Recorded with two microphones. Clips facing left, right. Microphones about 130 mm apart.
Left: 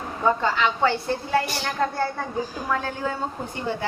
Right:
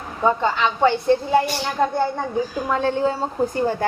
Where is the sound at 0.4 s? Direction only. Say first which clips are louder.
Right 3 dB; 20° right (ahead or behind).